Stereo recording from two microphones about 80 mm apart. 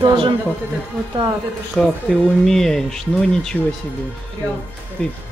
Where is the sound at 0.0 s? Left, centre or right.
Right.